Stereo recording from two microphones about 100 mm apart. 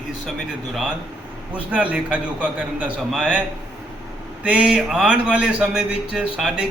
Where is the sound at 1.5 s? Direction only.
15° right (ahead or behind).